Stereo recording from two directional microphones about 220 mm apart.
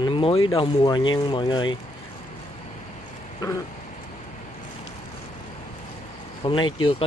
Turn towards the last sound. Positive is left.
turn(degrees=25)  # may be behind; listen again after turning